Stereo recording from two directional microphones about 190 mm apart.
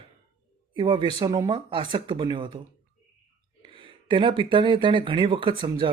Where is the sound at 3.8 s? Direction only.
25° right (ahead or behind).